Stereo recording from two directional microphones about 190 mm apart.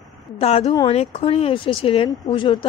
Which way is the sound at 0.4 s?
30° left (ahead or behind).